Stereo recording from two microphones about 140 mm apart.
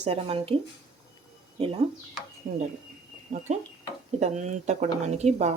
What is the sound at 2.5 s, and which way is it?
Speech, 50° right (ahead or behind).